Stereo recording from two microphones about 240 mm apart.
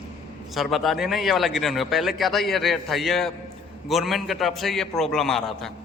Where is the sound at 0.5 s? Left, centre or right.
Centre.